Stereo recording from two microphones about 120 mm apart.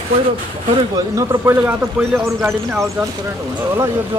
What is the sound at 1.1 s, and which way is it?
Speech, 25° right (ahead or behind).